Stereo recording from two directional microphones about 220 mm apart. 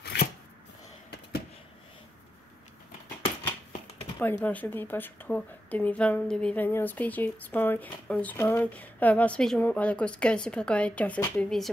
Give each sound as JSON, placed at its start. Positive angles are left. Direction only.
{"t": 0.0, "sound": "shuffling cards", "side_deg": 45}
{"t": 4.2, "sound": "speech", "side_deg": 10}